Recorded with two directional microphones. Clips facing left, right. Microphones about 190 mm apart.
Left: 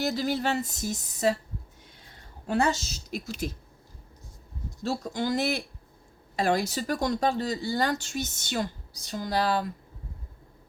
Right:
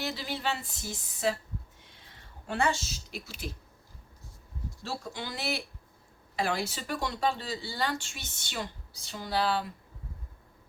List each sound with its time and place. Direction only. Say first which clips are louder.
0.0 s speech: left 7 dB; 45° left (ahead or behind)
2.5 s speech: left 4 dB; 40° left (ahead or behind)
4.8 s speech: left 9 dB; 40° left (ahead or behind)